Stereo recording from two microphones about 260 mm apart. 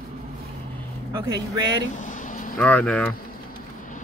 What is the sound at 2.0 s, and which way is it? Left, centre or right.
Vehicle, left.